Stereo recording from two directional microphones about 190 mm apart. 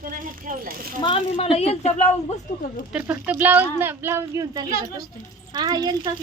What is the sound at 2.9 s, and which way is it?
Speech, 5° right (ahead or behind).